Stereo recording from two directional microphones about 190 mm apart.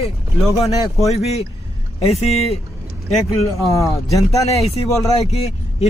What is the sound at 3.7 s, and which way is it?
Speech, 15° left (ahead or behind).